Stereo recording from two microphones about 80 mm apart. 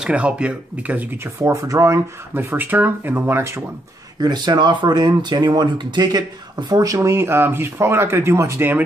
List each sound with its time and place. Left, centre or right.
0.0 s speech: centre
1.1 s speech: right
2.3 s speech: right
4.2 s speech: right